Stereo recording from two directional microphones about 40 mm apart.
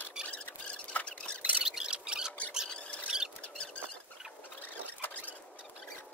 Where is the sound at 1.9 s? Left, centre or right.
Right.